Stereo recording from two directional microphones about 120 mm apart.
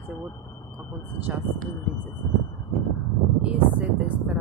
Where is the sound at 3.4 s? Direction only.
10° right (ahead or behind).